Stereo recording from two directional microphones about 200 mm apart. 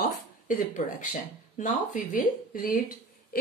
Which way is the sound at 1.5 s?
40° left (ahead or behind).